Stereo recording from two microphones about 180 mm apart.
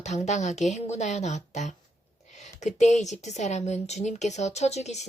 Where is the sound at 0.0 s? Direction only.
40° left (ahead or behind).